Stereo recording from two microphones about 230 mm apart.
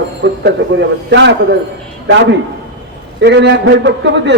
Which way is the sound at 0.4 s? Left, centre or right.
Right.